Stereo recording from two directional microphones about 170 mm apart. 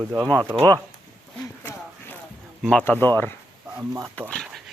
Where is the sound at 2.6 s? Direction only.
5° left (ahead or behind).